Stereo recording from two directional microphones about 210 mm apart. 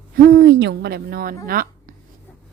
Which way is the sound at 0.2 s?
50° right (ahead or behind).